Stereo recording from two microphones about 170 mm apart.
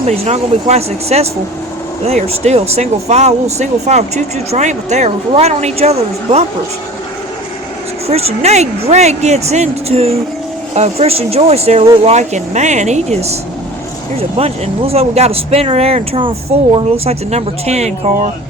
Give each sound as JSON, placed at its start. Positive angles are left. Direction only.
{"t": 0.1, "sound": "speech", "side_deg": -40}
{"t": 8.0, "sound": "speech", "side_deg": -35}